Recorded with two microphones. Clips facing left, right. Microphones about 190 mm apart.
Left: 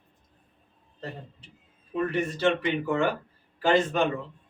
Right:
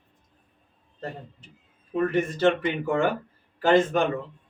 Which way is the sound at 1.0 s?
50° right (ahead or behind).